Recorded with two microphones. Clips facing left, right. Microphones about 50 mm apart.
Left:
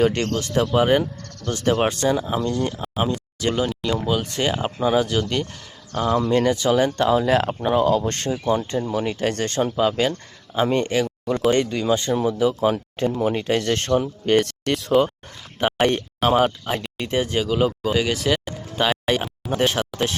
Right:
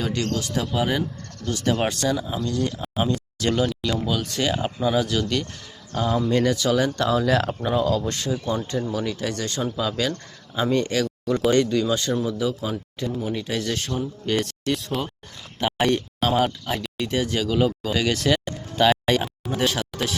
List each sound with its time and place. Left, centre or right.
0.0 s speech: left
1.9 s speech: left
3.0 s speech: centre
3.9 s speech: left
6.3 s speech: left
9.2 s speech: left
12.7 s speech: left
16.2 s speech: centre
19.5 s speech: left